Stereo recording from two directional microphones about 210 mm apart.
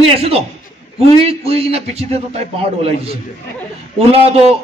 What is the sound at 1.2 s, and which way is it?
A man's voice, 30° right (ahead or behind).